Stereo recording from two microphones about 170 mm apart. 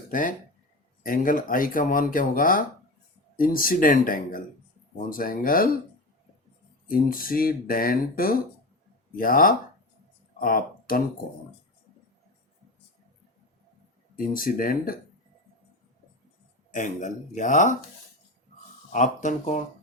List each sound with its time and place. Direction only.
0.1 s speech: 50° left (ahead or behind)
6.8 s speech: 55° left (ahead or behind)
14.2 s speech: 55° left (ahead or behind)
16.7 s speech: 45° left (ahead or behind)
18.9 s speech: 45° left (ahead or behind)